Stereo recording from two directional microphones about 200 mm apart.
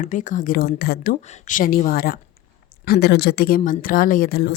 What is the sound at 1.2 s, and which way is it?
A woman's voice, 40° left (ahead or behind).